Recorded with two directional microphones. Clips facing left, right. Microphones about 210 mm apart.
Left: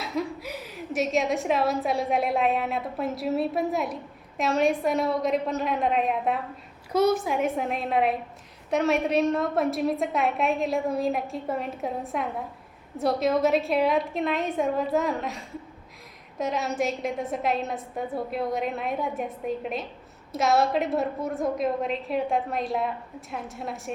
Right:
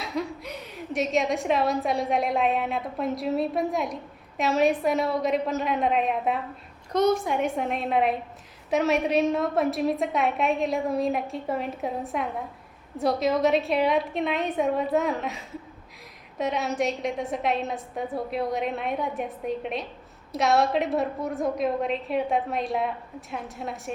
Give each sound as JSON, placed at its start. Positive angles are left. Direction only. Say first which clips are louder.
{"t": 0.0, "sound": "a woman's voice", "louder": "left 1 dB", "side_deg": 0}